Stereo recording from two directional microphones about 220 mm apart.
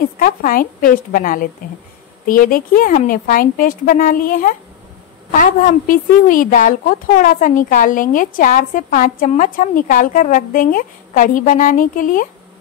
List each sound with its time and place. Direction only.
0.2 s a woman's voice: 40° left (ahead or behind)